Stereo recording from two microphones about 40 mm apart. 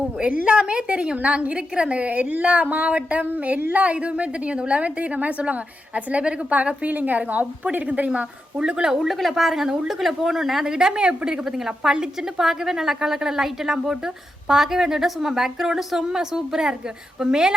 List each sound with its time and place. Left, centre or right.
0.2 s a woman's voice: right
2.0 s a woman's voice: right
6.8 s a woman's voice: right; by 10.8 s centre
10.8 s a woman's voice: right